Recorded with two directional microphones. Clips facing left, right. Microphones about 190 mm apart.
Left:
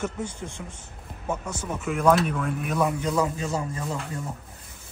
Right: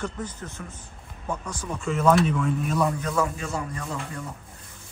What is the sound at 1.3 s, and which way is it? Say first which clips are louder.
Speech: left 2 dB; 25° left (ahead or behind).